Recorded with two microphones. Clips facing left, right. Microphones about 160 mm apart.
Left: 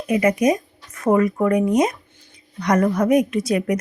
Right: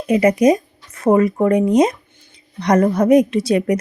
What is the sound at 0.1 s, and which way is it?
Speech, 30° right (ahead or behind).